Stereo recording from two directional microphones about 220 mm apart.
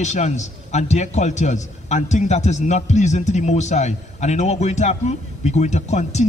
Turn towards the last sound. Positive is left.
turn(degrees=30)  # may be behind; listen again after turning